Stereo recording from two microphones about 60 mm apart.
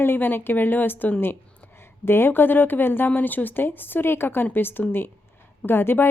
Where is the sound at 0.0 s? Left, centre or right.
Left.